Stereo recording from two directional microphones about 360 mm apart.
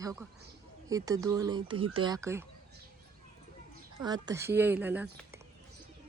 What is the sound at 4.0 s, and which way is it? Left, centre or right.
Speech, centre.